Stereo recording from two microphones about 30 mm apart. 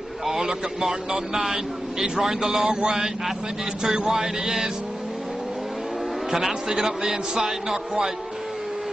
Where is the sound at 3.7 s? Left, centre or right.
Right.